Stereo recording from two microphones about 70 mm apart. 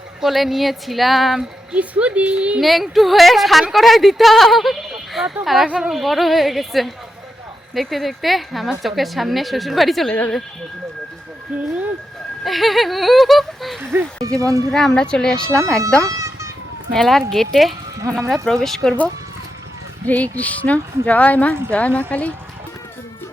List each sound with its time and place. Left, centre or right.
0.2 s a woman's voice: centre
1.7 s speech: centre
2.6 s a woman's voice: centre
6.0 s a woman's voice: centre
10.1 s speech: left
11.5 s speech: centre
12.5 s a woman's voice: centre
14.2 s speech: right
14.7 s a woman's voice: centre
14.9 s speech: centre
16.0 s music: right
16.9 s a woman's voice: centre
20.1 s speech: left